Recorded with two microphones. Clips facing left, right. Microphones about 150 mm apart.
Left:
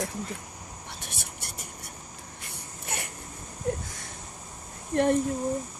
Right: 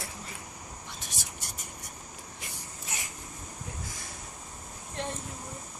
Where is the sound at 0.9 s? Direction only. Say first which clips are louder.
Left 2 dB; 60° left (ahead or behind).